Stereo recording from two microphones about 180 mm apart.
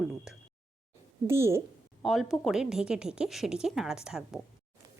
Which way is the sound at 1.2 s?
15° right (ahead or behind).